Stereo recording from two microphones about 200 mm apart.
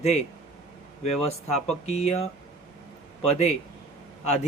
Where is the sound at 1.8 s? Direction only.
30° left (ahead or behind).